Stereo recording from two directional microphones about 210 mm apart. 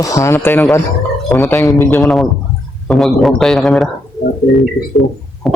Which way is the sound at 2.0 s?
Centre (ahead or behind).